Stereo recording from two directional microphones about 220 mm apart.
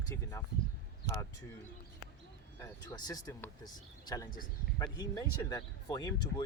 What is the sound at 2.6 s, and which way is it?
Speech, 15° left (ahead or behind).